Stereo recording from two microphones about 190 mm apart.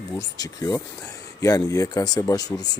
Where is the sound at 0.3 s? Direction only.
20° left (ahead or behind).